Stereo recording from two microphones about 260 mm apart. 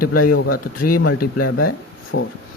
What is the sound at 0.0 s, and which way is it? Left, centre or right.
Speech, left.